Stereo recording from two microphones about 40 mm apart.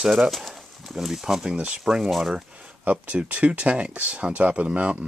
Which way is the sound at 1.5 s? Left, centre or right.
Right.